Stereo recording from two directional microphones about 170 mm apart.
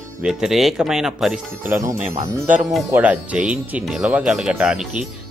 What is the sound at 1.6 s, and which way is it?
Speech, 20° right (ahead or behind).